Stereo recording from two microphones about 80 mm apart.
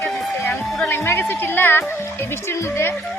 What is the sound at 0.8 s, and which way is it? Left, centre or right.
A woman's voice, left.